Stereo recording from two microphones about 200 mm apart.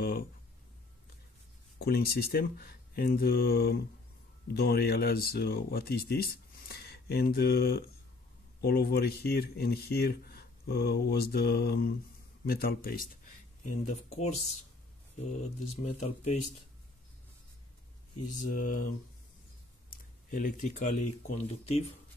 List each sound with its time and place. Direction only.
1.8 s speech: 50° left (ahead or behind)
13.7 s speech: 35° left (ahead or behind)
15.8 s speech: 35° left (ahead or behind)
18.3 s speech: 40° left (ahead or behind)
20.2 s speech: 40° left (ahead or behind)